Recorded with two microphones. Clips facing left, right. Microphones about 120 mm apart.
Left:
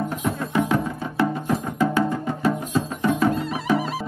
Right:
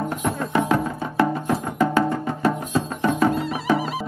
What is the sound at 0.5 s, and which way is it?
Music, 55° right (ahead or behind).